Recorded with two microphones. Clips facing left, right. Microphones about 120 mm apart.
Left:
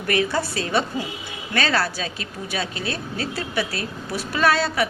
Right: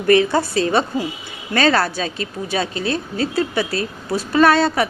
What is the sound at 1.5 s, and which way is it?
A woman's voice, 40° right (ahead or behind).